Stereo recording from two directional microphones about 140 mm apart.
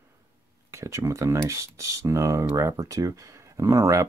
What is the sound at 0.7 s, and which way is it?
Speech, 20° right (ahead or behind).